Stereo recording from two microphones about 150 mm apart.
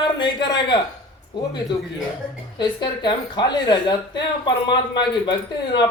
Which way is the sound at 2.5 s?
30° left (ahead or behind).